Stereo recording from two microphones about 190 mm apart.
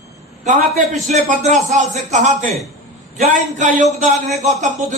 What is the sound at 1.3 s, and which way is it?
Speech, 40° right (ahead or behind).